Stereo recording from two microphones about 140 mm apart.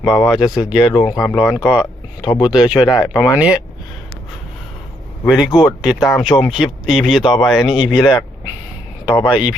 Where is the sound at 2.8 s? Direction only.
30° left (ahead or behind).